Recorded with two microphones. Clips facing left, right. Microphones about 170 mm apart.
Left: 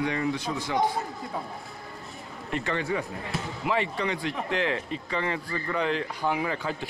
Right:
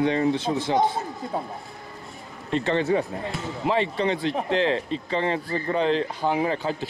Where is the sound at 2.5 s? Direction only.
25° right (ahead or behind).